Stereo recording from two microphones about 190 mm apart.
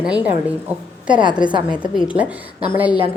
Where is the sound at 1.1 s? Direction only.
25° right (ahead or behind).